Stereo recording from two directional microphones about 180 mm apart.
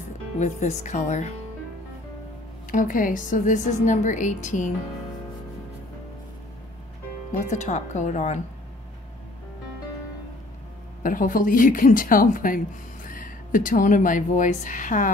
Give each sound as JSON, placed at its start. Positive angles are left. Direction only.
{"t": 0.4, "sound": "speech", "side_deg": 40}
{"t": 2.7, "sound": "speech", "side_deg": 50}
{"t": 7.3, "sound": "speech", "side_deg": 40}
{"t": 11.0, "sound": "speech", "side_deg": 45}